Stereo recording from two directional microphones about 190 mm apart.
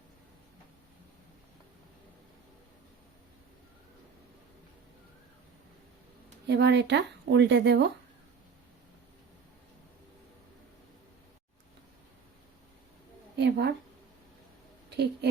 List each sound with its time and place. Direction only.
6.5 s speech: 65° right (ahead or behind)
13.3 s a sound: 65° right (ahead or behind)
14.8 s a woman's voice: 60° right (ahead or behind)